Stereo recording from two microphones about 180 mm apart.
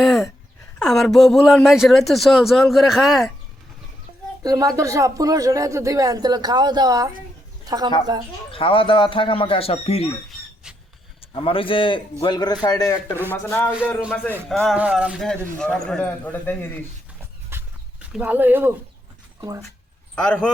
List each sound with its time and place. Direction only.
0.0 s a sound: centre (ahead or behind)
0.8 s a man's voice: centre (ahead or behind)
4.4 s speech: 20° right (ahead or behind)
7.6 s bird: 20° right (ahead or behind)
8.1 s speech: 20° right (ahead or behind)
8.5 s speech: 30° left (ahead or behind)
11.3 s a man's voice: 30° left (ahead or behind); by 16.8 s 10° left (ahead or behind)
17.5 s dog: 15° right (ahead or behind)
18.1 s speech: 10° right (ahead or behind)
20.1 s a man's voice: 5° left (ahead or behind)